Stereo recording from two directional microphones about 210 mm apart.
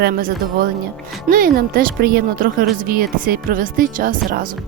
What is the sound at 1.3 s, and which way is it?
Speech, 45° right (ahead or behind).